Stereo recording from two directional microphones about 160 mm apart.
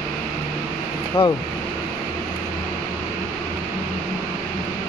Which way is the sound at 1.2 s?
35° left (ahead or behind).